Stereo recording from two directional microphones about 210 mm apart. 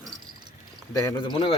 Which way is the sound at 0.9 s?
15° left (ahead or behind).